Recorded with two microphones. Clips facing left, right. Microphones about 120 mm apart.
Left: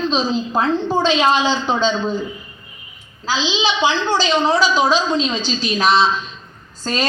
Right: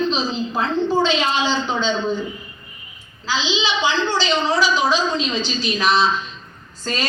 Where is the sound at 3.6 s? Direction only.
40° left (ahead or behind).